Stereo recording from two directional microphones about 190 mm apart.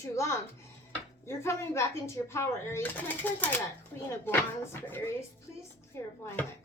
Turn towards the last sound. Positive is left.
turn(degrees=10)  # may be behind; listen again after turning